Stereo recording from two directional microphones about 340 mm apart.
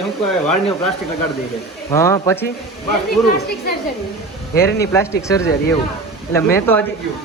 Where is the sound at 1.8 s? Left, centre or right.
Centre.